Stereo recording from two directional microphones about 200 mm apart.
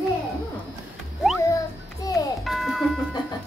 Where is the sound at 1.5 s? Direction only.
15° left (ahead or behind).